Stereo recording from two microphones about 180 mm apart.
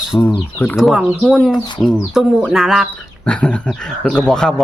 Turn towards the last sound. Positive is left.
turn(degrees=5)  # may be behind; listen again after turning